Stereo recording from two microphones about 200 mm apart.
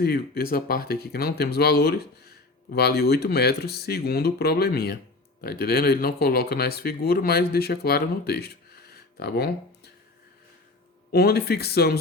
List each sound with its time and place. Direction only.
0.0 s speech: 50° left (ahead or behind)
11.1 s speech: 50° left (ahead or behind)